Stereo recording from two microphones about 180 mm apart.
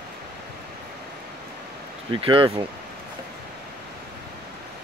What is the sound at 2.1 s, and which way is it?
Speech, 30° right (ahead or behind).